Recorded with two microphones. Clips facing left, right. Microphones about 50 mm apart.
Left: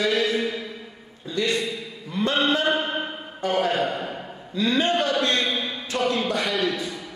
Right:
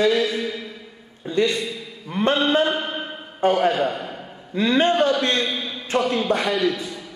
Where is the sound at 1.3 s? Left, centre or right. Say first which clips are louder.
Right 3 dB; right.